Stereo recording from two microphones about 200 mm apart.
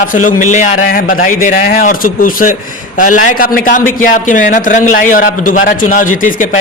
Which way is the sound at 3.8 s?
10° left (ahead or behind).